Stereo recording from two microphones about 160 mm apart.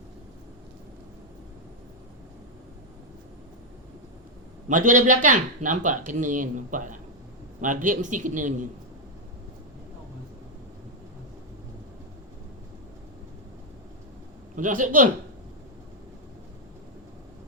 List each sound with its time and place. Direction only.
4.7 s speech: 55° right (ahead or behind)
14.5 s a man's voice: 55° right (ahead or behind)